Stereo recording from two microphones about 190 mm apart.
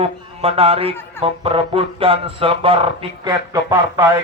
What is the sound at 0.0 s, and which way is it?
Speech, 30° right (ahead or behind).